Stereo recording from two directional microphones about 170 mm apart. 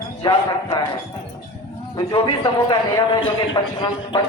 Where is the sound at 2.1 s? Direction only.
30° left (ahead or behind).